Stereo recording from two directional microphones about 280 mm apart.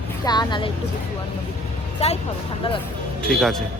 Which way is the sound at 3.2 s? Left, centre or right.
Centre.